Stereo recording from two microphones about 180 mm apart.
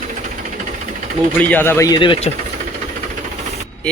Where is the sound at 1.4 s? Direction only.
10° left (ahead or behind); by 2.3 s 25° left (ahead or behind).